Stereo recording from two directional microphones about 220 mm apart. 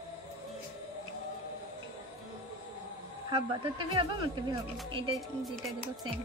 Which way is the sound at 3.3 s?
20° right (ahead or behind).